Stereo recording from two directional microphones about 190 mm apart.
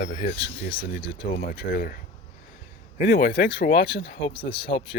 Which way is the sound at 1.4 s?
50° left (ahead or behind).